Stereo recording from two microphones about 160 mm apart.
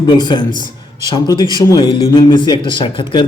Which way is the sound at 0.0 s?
25° left (ahead or behind).